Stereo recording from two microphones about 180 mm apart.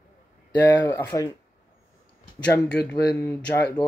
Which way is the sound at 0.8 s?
15° left (ahead or behind).